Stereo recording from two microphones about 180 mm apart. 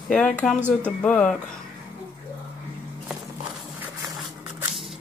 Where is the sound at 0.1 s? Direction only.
5° left (ahead or behind).